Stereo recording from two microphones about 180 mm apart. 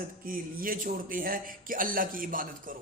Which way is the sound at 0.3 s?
50° right (ahead or behind).